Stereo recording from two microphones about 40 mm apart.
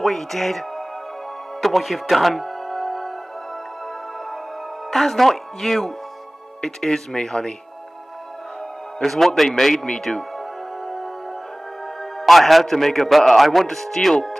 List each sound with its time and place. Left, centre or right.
0.0 s speech: centre
1.6 s music: centre
4.9 s speech: centre
9.0 s a man's voice: centre
10.0 s music: centre
11.8 s a man's voice: centre